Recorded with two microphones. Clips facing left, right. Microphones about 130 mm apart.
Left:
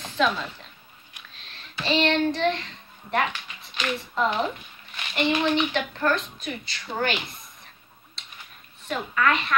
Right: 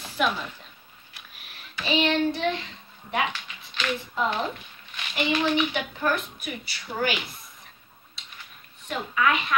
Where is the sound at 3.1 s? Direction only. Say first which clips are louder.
Left 2 dB; 10° right (ahead or behind).